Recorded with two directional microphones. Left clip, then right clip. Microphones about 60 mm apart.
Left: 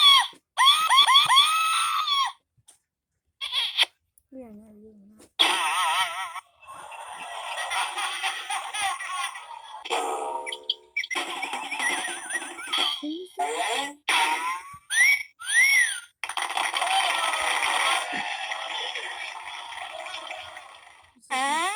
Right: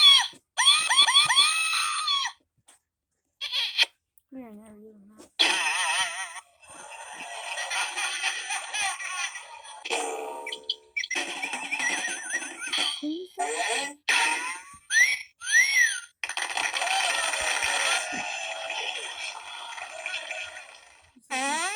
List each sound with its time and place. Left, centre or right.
0.0 s screaming: centre
3.3 s a sound: left
5.4 s fart: left